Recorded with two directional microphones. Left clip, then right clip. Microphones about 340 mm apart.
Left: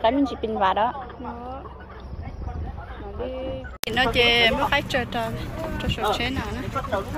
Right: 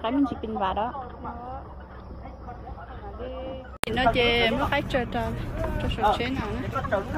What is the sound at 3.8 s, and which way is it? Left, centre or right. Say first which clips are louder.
Speech: left 2 dB; centre.